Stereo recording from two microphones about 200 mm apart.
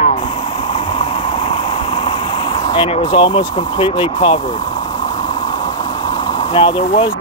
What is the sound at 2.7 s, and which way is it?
Speech, 25° left (ahead or behind).